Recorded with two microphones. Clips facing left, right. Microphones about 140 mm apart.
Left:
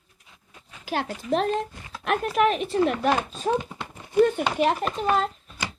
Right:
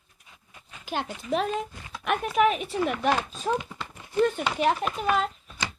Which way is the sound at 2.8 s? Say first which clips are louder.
Even; 35° left (ahead or behind).